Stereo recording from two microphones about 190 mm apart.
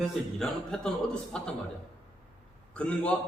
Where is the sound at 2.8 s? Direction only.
5° left (ahead or behind).